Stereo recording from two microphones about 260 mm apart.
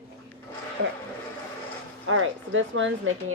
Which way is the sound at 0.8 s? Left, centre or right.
Right.